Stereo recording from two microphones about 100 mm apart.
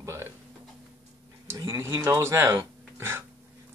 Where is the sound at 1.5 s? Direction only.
25° right (ahead or behind).